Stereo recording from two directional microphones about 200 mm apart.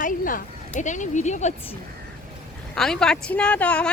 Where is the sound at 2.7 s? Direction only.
Centre (ahead or behind).